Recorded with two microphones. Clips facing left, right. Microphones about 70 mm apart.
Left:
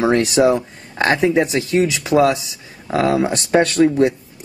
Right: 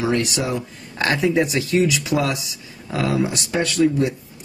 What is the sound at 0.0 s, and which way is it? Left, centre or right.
Speech, left.